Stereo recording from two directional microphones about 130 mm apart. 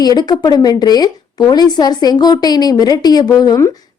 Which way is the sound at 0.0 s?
30° left (ahead or behind).